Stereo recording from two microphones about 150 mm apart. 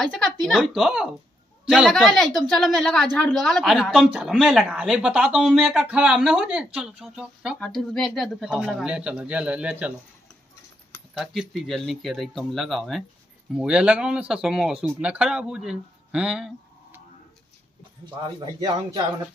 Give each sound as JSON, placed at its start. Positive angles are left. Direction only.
{"t": 0.0, "sound": "a woman's voice", "side_deg": 5}
{"t": 7.5, "sound": "a woman's voice", "side_deg": 5}
{"t": 11.1, "sound": "a woman's voice", "side_deg": 0}
{"t": 18.0, "sound": "speech", "side_deg": -30}